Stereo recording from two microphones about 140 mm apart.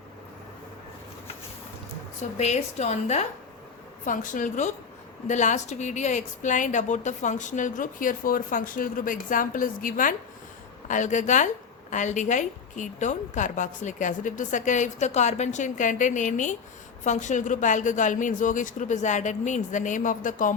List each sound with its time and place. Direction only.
2.4 s a woman's voice: 55° left (ahead or behind)
4.0 s a woman's voice: 65° left (ahead or behind)
10.8 s a woman's voice: 60° left (ahead or behind)